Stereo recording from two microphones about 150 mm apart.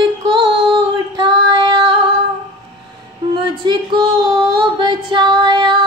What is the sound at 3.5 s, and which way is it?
Music, 30° right (ahead or behind).